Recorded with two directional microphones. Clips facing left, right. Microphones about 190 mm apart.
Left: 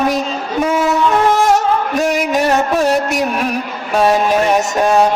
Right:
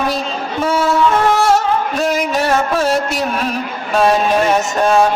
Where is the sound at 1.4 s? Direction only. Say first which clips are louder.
Left 1 dB; 20° left (ahead or behind).